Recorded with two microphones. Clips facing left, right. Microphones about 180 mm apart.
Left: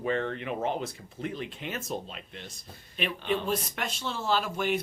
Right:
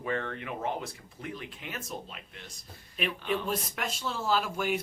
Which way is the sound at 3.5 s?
5° right (ahead or behind).